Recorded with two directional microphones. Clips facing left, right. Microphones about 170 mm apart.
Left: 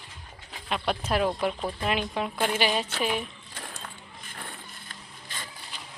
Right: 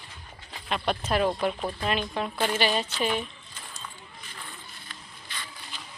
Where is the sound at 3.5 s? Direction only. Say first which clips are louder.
Left 3 dB; 65° left (ahead or behind).